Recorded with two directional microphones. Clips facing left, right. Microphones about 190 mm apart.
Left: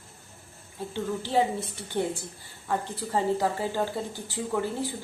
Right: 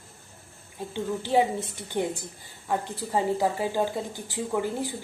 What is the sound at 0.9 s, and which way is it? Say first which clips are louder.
Speech: right 2 dB; 15° right (ahead or behind).